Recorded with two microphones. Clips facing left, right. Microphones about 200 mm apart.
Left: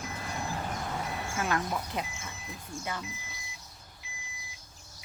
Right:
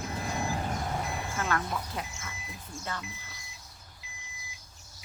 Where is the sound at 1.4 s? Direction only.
20° left (ahead or behind).